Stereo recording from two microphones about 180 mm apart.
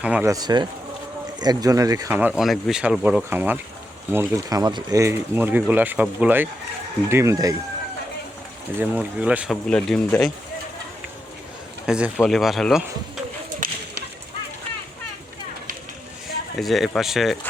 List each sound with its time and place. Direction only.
0.0 s speech: 5° right (ahead or behind)
0.3 s speech: 20° right (ahead or behind)
2.4 s speech: centre (ahead or behind); by 7.5 s 20° right (ahead or behind)
8.8 s speech: 5° right (ahead or behind)
9.6 s speech: 5° left (ahead or behind)
11.9 s speech: 5° right (ahead or behind)
13.6 s whip: 50° right (ahead or behind)
16.6 s speech: centre (ahead or behind)